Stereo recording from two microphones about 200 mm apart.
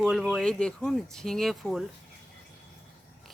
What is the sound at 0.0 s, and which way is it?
Speech, 5° right (ahead or behind).